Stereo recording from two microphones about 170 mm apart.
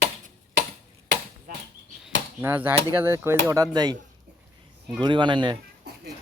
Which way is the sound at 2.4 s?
10° right (ahead or behind).